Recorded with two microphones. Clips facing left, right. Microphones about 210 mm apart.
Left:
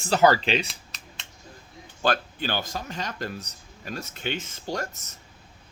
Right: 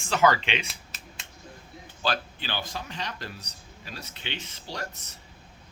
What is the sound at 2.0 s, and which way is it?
A man's voice, 50° left (ahead or behind).